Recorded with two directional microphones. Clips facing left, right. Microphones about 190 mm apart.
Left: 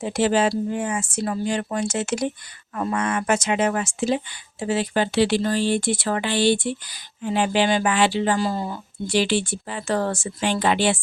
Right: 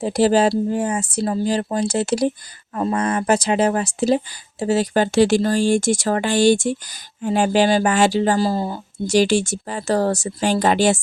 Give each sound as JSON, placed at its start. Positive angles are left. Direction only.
{"t": 0.0, "sound": "speech", "side_deg": -35}